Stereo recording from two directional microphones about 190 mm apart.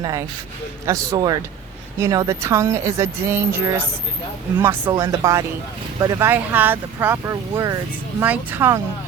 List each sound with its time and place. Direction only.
0.0 s speech: 15° right (ahead or behind)
4.9 s speech: 20° right (ahead or behind)